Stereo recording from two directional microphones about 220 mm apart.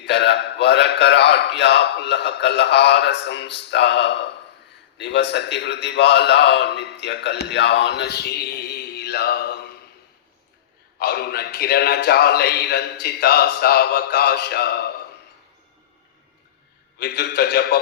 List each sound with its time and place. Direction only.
0.0 s a man's voice: 50° left (ahead or behind)
11.0 s a man's voice: 45° left (ahead or behind)
17.0 s a man's voice: 50° left (ahead or behind)